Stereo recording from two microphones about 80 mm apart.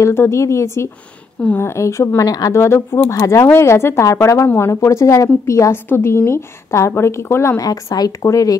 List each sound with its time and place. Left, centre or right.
0.0 s a woman's voice: left
2.5 s a woman's voice: left
7.5 s a woman's voice: left